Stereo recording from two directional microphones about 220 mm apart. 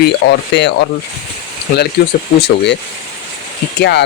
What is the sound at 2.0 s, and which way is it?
Speech, 45° left (ahead or behind).